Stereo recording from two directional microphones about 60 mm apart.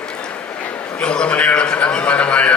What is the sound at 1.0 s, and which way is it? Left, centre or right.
A man's voice, centre.